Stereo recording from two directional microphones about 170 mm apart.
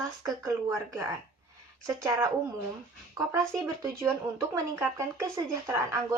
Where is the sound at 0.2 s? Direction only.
20° right (ahead or behind).